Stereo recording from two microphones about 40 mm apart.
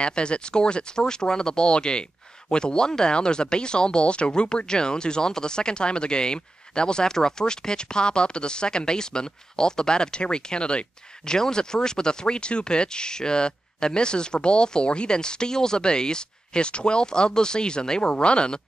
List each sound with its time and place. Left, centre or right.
0.0 s speech: left